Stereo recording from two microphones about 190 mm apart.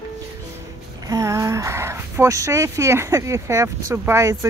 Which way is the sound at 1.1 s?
15° right (ahead or behind).